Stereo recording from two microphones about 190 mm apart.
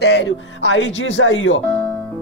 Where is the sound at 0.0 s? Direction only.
65° left (ahead or behind); by 1.6 s 80° left.